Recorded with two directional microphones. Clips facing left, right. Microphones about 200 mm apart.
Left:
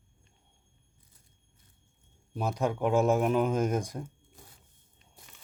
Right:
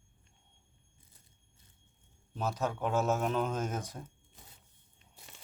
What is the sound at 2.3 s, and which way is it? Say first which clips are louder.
Speech: left 4 dB; 15° left (ahead or behind).